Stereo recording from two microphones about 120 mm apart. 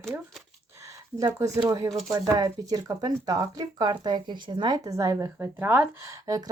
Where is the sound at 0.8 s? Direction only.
25° right (ahead or behind).